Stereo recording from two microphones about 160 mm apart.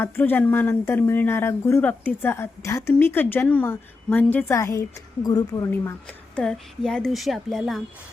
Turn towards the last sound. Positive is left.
turn(degrees=0)  # may be behind; listen again after turning